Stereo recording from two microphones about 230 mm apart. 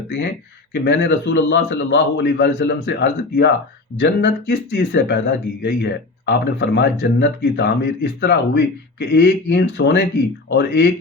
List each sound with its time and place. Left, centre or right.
0.7 s speech: left